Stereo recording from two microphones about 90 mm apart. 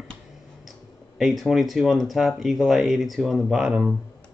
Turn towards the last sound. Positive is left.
turn(degrees=-10)  # may be behind; listen again after turning